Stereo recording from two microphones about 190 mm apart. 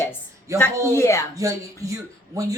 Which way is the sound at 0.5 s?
15° right (ahead or behind).